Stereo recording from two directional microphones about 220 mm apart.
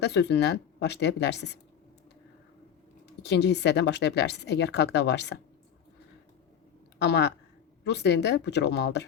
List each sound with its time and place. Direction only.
0.0 s speech: 50° left (ahead or behind)
3.2 s speech: 50° left (ahead or behind)
7.0 s speech: 50° left (ahead or behind)